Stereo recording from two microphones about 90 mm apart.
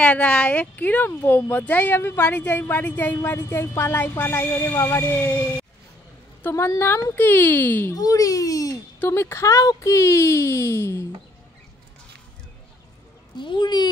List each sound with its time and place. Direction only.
0.0 s speech: 15° left (ahead or behind)
6.5 s speech: 30° left (ahead or behind)
7.9 s speech: 40° left (ahead or behind)
9.0 s speech: 30° left (ahead or behind)
13.4 s speech: 60° left (ahead or behind)